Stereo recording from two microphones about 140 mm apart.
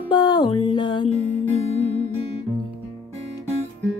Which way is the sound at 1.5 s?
45° left (ahead or behind).